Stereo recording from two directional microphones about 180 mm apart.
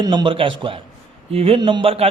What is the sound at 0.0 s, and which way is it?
A man's voice, 25° right (ahead or behind).